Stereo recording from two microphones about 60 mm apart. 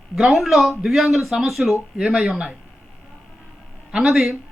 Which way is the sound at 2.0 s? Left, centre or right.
Centre.